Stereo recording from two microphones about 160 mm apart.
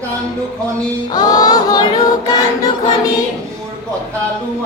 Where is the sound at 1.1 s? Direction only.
25° left (ahead or behind).